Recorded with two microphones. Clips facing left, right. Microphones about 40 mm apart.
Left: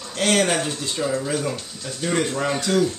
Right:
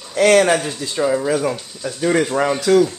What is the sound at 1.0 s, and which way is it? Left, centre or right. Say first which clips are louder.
Speech: right 7 dB; right.